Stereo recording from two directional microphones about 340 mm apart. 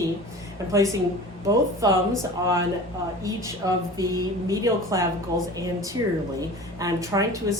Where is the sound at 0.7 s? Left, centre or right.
Centre.